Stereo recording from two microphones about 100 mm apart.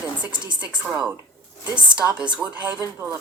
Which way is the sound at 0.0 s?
15° right (ahead or behind).